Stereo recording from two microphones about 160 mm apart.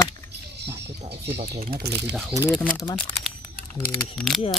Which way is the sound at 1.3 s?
85° right.